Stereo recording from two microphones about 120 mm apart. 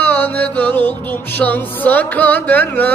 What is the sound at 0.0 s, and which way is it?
Music, 15° left (ahead or behind).